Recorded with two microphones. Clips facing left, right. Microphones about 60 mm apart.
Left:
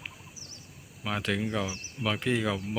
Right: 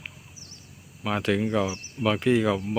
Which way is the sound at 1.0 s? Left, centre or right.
Centre.